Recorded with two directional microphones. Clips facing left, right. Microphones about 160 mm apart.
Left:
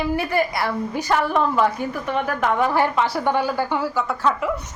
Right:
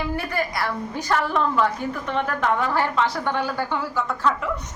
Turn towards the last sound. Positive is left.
turn(degrees=5)  # may be behind; listen again after turning